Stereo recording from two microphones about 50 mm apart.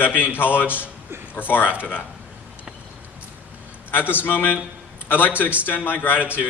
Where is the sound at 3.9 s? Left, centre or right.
Left.